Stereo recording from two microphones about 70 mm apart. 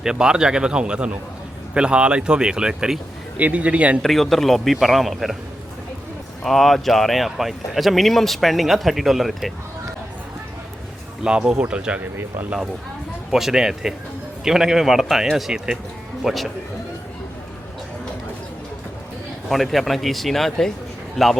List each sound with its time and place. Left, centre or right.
0.0 s speech: centre
3.3 s a man's voice: right
4.0 s speech: centre
6.4 s speech: centre
11.2 s speech: centre
13.3 s speech: centre
19.5 s speech: centre